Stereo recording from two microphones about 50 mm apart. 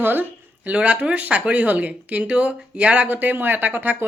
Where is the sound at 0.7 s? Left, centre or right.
Right.